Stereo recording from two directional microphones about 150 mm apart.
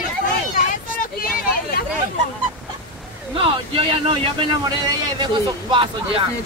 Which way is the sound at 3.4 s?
35° right (ahead or behind).